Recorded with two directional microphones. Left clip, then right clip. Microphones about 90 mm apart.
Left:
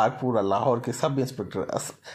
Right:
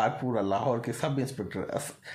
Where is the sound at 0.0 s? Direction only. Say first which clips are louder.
Left 5 dB; 40° left (ahead or behind).